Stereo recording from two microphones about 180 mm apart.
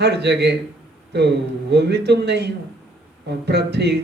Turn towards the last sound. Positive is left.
turn(degrees=-65)  # may be behind; listen again after turning